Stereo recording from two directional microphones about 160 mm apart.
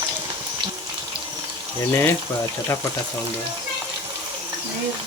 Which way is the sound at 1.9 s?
15° left (ahead or behind).